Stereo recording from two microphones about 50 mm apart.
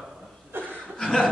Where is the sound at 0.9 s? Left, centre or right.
Centre.